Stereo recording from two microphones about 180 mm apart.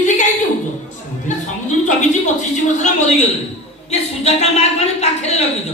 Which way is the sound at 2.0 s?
40° left (ahead or behind).